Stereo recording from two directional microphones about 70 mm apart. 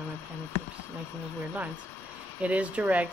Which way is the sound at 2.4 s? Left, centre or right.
Centre.